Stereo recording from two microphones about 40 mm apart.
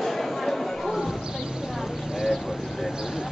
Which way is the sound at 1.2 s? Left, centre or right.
Centre.